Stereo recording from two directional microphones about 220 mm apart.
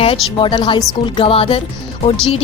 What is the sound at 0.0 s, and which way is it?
A woman's voice, 25° left (ahead or behind).